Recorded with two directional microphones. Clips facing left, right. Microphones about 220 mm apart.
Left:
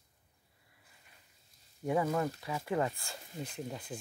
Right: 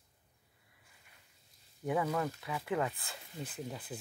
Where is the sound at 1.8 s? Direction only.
25° left (ahead or behind).